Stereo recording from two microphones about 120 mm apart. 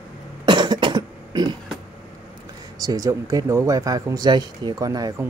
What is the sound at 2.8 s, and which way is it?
Speech, 30° right (ahead or behind).